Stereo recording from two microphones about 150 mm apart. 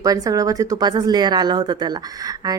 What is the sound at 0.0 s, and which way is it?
Speech, 25° right (ahead or behind).